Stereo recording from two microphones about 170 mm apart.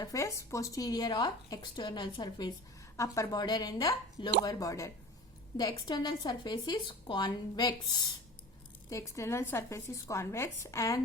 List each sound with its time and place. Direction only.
0.0 s a woman's voice: 20° left (ahead or behind)